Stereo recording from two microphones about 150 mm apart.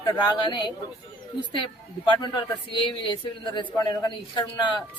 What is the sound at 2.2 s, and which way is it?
Speech, 30° left (ahead or behind).